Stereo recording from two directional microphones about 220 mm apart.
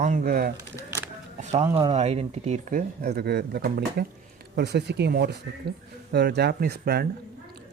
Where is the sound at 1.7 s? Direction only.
25° right (ahead or behind).